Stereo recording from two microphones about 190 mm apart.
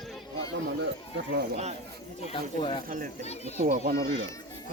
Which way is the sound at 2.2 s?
30° left (ahead or behind).